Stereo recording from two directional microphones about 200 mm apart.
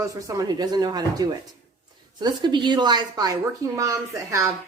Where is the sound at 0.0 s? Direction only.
15° right (ahead or behind).